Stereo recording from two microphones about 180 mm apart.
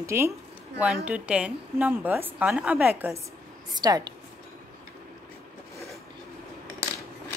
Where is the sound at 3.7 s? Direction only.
20° right (ahead or behind).